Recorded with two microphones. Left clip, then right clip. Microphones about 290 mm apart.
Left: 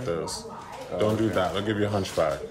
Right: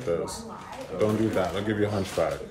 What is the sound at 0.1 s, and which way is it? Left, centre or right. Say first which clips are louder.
Speech: right 2 dB; centre.